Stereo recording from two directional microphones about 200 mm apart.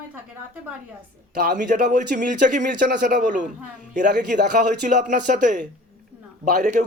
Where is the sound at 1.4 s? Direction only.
45° right (ahead or behind).